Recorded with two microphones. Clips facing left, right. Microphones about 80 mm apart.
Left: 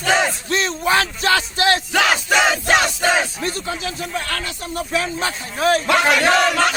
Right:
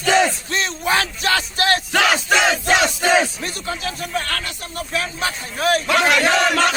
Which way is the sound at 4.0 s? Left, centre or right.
Left.